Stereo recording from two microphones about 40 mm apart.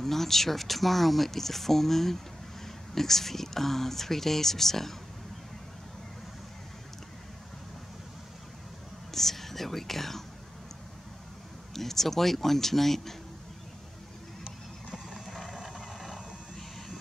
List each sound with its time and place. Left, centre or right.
0.0 s speech: centre
9.1 s whispering: centre
11.7 s speech: centre
15.0 s mechanisms: centre